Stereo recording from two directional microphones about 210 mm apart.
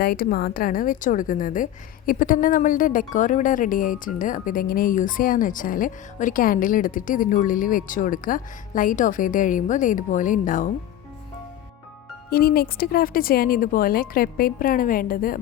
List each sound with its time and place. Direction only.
0.0 s a woman's voice: 45° left (ahead or behind)
12.3 s speech: 45° left (ahead or behind)